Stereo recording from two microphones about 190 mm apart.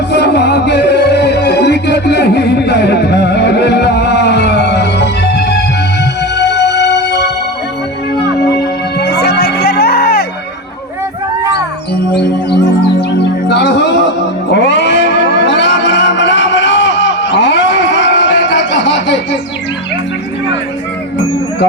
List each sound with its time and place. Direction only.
0.1 s music: 60° left (ahead or behind)
8.5 s music: 60° left (ahead or behind)
12.1 s music: 60° left (ahead or behind)
14.5 s a sound: 65° left (ahead or behind)